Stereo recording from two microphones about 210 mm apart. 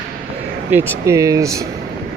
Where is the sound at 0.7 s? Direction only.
10° right (ahead or behind).